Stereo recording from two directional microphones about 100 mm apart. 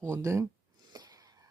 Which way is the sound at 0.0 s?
30° right (ahead or behind).